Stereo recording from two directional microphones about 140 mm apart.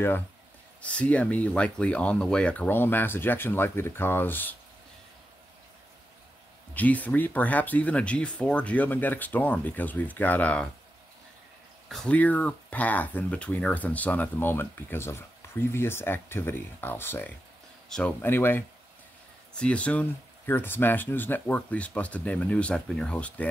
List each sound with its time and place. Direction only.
0.8 s speech: 10° left (ahead or behind)
6.7 s speech: 10° left (ahead or behind)
11.9 s speech: 5° left (ahead or behind)
17.8 s speech: 5° left (ahead or behind)
18.2 s speech: 15° left (ahead or behind)